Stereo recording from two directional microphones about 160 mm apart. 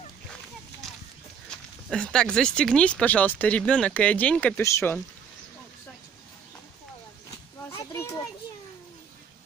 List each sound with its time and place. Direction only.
1.5 s a sound: 5° left (ahead or behind)
1.9 s speech: 5° left (ahead or behind)
7.9 s children playing: 15° left (ahead or behind)